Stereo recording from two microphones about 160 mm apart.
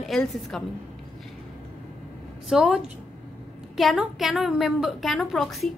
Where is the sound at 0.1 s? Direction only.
5° left (ahead or behind).